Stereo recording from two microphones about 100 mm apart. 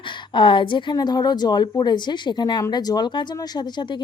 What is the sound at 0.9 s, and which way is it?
Speech, 45° left (ahead or behind).